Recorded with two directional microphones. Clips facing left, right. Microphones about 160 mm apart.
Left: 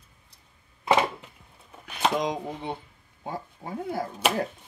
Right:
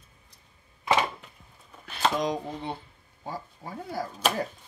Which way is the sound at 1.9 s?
15° left (ahead or behind).